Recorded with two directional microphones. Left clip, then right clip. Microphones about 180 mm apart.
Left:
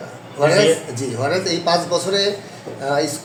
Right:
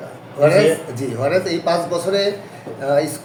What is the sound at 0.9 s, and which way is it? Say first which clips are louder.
Speech: right 2 dB; 10° right (ahead or behind).